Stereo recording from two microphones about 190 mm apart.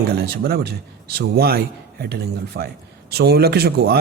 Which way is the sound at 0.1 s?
55° right (ahead or behind).